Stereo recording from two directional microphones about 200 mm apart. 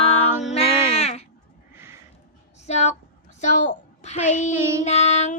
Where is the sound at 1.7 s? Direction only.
10° right (ahead or behind).